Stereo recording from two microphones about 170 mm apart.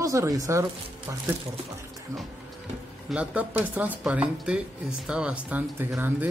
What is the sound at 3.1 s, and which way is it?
Speech, 10° right (ahead or behind).